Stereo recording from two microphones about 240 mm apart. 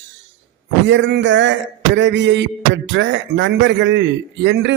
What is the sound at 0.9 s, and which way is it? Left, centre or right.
A man's voice, right.